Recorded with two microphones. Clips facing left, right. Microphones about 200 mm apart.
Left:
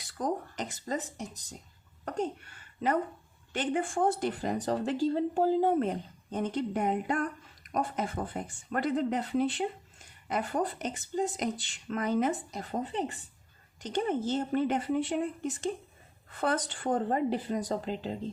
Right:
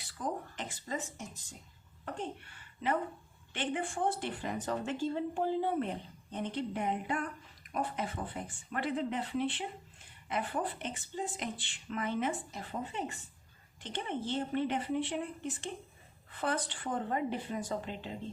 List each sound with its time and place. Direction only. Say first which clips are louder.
0.2 s speech: left 5 dB; 40° left (ahead or behind)
3.5 s speech: left 5 dB; 45° left (ahead or behind)